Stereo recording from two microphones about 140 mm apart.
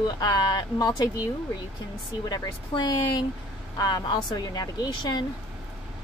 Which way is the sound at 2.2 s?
30° left (ahead or behind).